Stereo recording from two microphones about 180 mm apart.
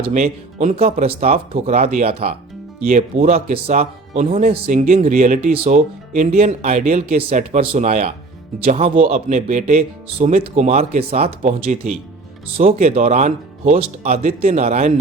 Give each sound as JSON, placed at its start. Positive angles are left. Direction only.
{"t": 0.0, "sound": "speech", "side_deg": -40}